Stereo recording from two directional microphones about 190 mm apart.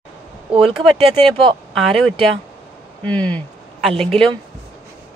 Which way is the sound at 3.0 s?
5° left (ahead or behind).